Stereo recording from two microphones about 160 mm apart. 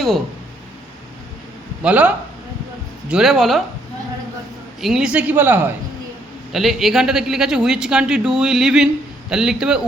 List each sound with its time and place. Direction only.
1.8 s a man's voice: 10° right (ahead or behind)
4.8 s a man's voice: 5° right (ahead or behind)